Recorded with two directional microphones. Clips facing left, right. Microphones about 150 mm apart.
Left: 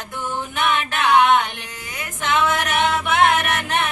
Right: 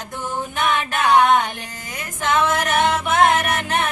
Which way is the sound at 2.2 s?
40° right (ahead or behind).